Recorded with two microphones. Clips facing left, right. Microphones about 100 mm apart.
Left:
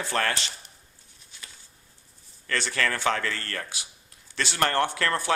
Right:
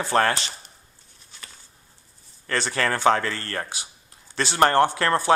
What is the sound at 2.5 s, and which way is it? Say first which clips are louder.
Speech: right 3 dB; 30° right (ahead or behind).